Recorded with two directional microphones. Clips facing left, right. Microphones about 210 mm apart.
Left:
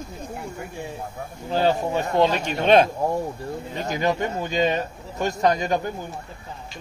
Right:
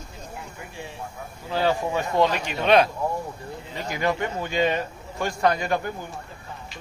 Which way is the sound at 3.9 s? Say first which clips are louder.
Left 1 dB; 20° left (ahead or behind).